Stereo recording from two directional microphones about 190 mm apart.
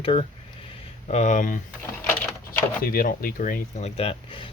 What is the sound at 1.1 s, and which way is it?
Speech, 40° left (ahead or behind).